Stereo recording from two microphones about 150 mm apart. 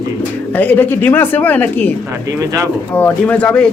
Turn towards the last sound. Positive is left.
turn(degrees=10)  # may be behind; listen again after turning